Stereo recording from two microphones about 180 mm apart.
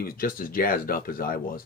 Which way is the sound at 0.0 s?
55° left (ahead or behind).